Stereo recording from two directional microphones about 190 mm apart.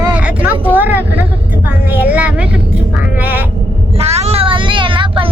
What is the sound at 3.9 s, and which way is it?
Child singing, 35° right (ahead or behind).